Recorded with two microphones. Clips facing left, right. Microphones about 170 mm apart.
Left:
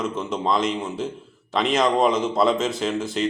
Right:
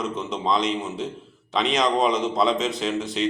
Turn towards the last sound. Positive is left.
turn(degrees=0)  # may be behind; listen again after turning